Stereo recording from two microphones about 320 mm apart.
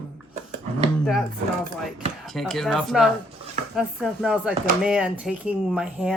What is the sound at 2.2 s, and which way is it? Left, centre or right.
Speech, centre.